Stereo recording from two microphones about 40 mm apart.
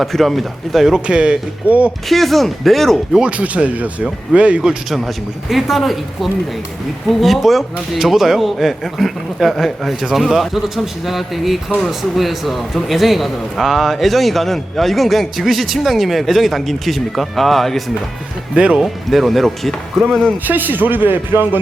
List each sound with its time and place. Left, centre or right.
0.0 s a man's voice: centre
0.9 s speech: right
2.0 s a man's voice: centre
3.2 s speech: right
4.9 s a man's voice: centre
18.5 s speech: right
18.8 s a man's voice: centre
20.4 s a man's voice: right